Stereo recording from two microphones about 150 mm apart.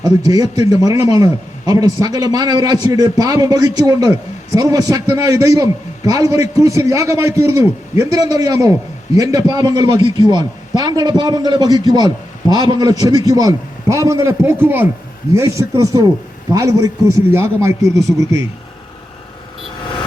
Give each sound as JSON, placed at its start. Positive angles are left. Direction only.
{"t": 0.0, "sound": "a man's voice", "side_deg": -25}